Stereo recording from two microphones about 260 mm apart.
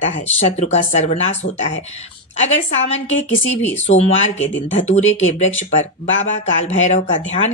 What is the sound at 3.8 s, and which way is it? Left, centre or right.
Speech, left.